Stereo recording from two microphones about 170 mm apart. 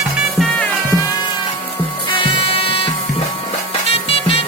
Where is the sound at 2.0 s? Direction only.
30° left (ahead or behind).